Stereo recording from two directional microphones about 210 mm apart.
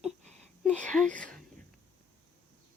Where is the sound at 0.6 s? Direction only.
5° left (ahead or behind).